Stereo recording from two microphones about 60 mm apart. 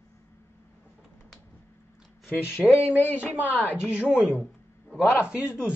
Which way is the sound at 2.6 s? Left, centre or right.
Centre.